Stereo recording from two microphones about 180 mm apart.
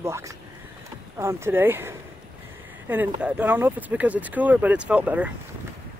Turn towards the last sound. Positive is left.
turn(degrees=-10)  # may be behind; listen again after turning